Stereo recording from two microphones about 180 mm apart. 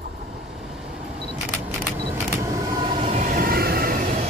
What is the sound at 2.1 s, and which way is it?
Vehicle, 15° right (ahead or behind).